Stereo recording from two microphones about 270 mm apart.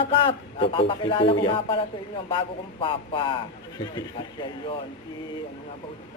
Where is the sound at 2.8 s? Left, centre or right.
Centre.